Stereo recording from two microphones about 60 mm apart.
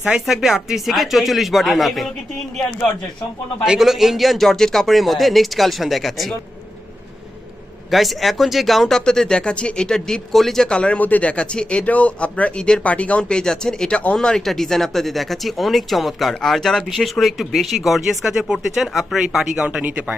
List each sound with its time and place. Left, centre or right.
0.3 s speech: centre
3.6 s speech: centre
7.9 s speech: centre
10.8 s speech: centre
19.8 s speech: right